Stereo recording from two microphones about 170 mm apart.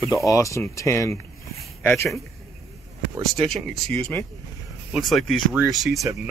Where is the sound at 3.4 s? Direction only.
Centre (ahead or behind).